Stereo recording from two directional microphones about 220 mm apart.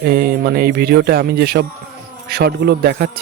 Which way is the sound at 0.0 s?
45° right (ahead or behind).